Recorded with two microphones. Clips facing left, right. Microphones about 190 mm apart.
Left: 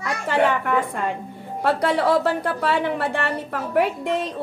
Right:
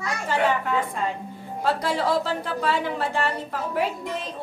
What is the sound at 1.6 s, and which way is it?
A woman's voice, 65° left (ahead or behind).